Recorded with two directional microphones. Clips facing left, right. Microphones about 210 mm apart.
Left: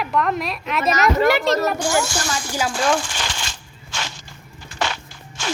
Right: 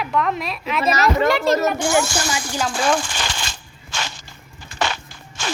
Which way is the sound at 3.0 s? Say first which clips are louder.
Right 1 dB; 50° right (ahead or behind).